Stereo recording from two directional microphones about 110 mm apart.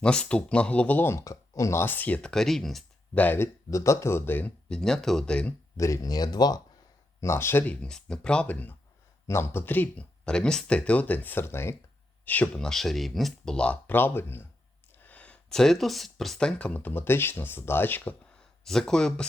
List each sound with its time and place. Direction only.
0.0 s speech: 10° left (ahead or behind)
3.2 s speech: 20° left (ahead or behind)
5.7 s speech: 30° left (ahead or behind)
7.2 s speech: 25° left (ahead or behind)
18.6 s speech: 5° left (ahead or behind)